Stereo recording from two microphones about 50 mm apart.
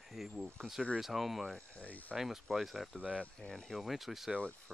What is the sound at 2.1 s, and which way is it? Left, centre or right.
Speech, centre.